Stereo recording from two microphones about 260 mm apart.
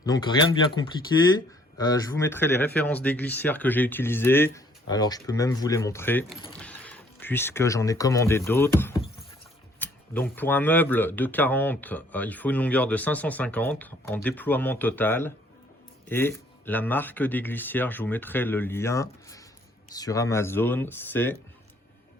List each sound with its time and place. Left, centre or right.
0.0 s speech: centre